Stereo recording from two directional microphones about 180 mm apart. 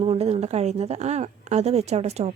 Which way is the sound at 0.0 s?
35° right (ahead or behind).